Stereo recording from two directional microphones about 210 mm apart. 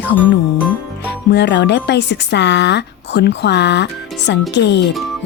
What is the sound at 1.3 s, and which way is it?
Speech, 55° left (ahead or behind).